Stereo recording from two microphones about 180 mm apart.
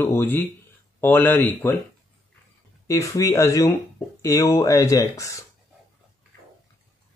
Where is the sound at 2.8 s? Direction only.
15° left (ahead or behind).